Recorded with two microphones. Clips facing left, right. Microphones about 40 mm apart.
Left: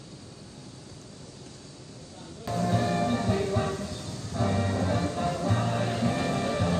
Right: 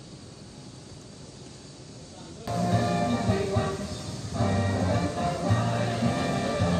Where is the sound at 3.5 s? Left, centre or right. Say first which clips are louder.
Even; left.